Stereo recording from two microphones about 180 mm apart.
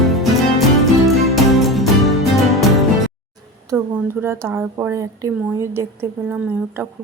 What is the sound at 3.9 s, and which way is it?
A woman's voice, 15° right (ahead or behind).